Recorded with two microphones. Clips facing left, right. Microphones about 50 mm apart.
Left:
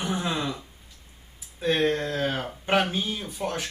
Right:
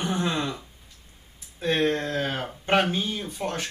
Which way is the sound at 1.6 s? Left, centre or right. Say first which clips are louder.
Even; centre.